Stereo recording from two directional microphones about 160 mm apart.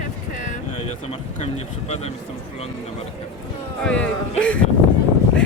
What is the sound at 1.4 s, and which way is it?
Speech, 40° left (ahead or behind).